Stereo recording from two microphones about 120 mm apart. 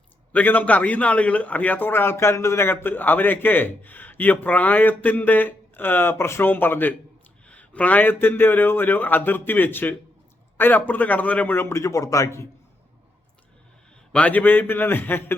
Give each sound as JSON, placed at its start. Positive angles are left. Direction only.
{"t": 0.3, "sound": "a man's voice", "side_deg": 15}
{"t": 14.1, "sound": "a man's voice", "side_deg": 10}